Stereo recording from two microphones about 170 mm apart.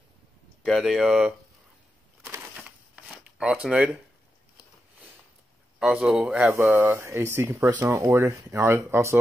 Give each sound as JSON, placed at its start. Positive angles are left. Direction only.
{"t": 0.7, "sound": "speech", "side_deg": 0}
{"t": 2.3, "sound": "shuffling cards", "side_deg": -10}
{"t": 5.8, "sound": "speech", "side_deg": -5}